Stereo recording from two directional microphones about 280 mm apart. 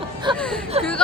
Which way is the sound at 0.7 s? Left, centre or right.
Right.